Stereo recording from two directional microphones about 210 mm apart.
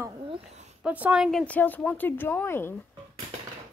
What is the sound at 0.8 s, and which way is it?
A woman's voice, 5° right (ahead or behind).